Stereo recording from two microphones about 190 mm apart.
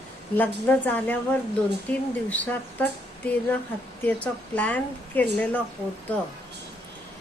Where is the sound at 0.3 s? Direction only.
10° left (ahead or behind).